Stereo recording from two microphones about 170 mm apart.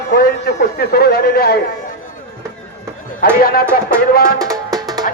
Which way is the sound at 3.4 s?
60° left (ahead or behind).